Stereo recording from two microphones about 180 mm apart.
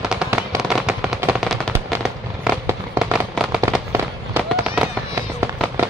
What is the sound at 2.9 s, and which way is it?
Fireworks, 5° right (ahead or behind).